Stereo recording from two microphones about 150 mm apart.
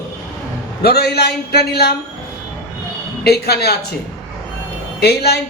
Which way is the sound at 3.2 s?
90° left.